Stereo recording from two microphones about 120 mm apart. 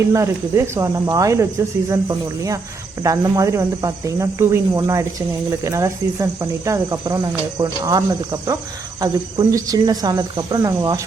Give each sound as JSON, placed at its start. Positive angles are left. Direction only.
{"t": 0.1, "sound": "speech", "side_deg": -25}